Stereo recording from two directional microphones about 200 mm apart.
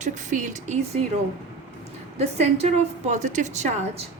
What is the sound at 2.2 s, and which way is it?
A woman's voice, 35° right (ahead or behind).